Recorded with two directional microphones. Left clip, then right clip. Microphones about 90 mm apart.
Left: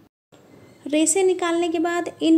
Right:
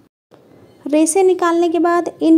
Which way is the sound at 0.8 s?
35° right (ahead or behind).